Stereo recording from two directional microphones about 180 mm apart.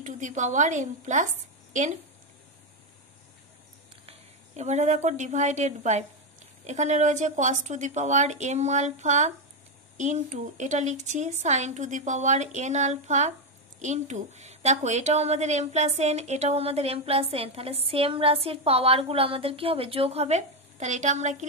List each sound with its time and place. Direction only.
0.0 s a woman's voice: 45° right (ahead or behind)
4.6 s a woman's voice: 40° right (ahead or behind)